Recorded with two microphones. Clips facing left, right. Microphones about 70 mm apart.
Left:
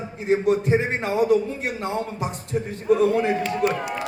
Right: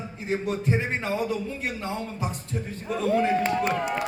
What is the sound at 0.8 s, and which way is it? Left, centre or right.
Speech, left.